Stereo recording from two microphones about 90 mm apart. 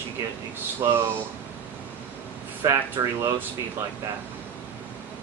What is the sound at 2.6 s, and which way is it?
Speech, 25° right (ahead or behind).